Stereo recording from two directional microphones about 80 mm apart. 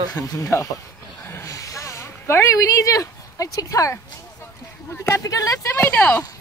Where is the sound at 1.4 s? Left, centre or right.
Left.